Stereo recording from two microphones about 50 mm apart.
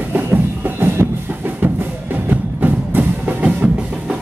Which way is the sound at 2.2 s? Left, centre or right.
Right.